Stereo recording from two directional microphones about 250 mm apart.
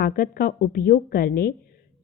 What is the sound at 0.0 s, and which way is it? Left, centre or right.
A woman's voice, left.